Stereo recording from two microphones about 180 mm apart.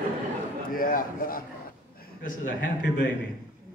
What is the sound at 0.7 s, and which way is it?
A man's voice, 50° left (ahead or behind).